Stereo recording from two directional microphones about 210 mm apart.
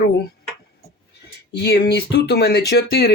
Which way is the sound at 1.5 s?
50° left (ahead or behind).